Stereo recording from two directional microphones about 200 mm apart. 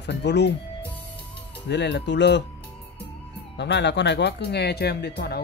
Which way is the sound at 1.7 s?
60° left (ahead or behind).